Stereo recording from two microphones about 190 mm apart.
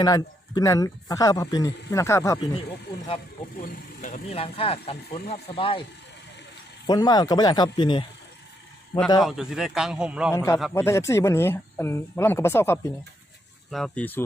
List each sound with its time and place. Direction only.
0.0 s speech: 20° left (ahead or behind)
4.0 s speech: 35° left (ahead or behind)
6.8 s speech: 20° left (ahead or behind)
9.2 s a man's voice: centre (ahead or behind)
10.3 s speech: 15° left (ahead or behind)
13.7 s speech: centre (ahead or behind)